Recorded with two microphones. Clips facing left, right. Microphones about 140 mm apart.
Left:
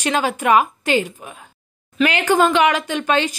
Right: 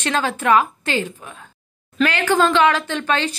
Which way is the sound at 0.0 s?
10° left (ahead or behind).